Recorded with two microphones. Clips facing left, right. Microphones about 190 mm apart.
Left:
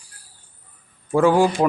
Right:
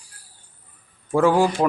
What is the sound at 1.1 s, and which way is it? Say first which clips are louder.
Speech: left 1 dB; centre (ahead or behind).